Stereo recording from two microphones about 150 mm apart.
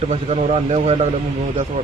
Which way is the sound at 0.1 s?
45° right (ahead or behind).